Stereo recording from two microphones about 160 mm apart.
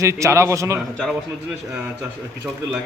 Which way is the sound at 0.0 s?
20° right (ahead or behind).